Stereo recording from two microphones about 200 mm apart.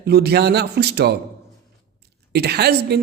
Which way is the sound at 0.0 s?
55° right (ahead or behind).